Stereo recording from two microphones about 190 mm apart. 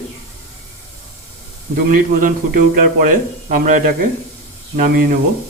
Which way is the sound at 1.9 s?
45° right (ahead or behind).